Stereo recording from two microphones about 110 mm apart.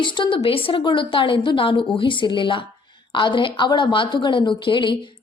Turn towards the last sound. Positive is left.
turn(degrees=50)  # may be behind; listen again after turning